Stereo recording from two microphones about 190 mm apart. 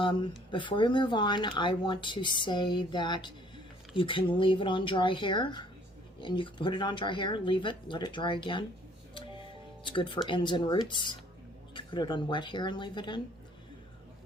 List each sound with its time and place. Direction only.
0.0 s speech: 25° left (ahead or behind)
9.8 s speech: 25° left (ahead or behind)